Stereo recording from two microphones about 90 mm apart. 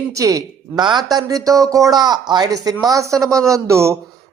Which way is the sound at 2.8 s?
40° right (ahead or behind).